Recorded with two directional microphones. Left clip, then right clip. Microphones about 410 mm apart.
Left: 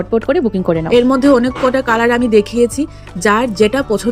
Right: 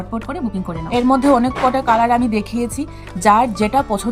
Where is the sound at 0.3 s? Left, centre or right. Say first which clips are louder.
Left 12 dB; centre.